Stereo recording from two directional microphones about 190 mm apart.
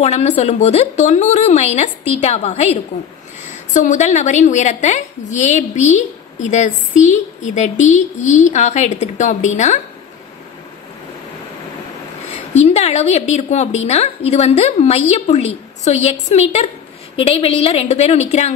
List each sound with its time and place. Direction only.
0.0 s a woman's voice: 35° left (ahead or behind)
12.6 s a woman's voice: 35° left (ahead or behind)